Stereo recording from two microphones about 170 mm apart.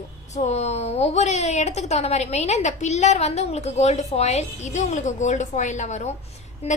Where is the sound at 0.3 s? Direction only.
40° left (ahead or behind).